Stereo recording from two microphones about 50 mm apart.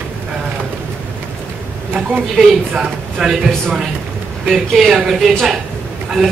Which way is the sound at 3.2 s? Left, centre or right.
Centre.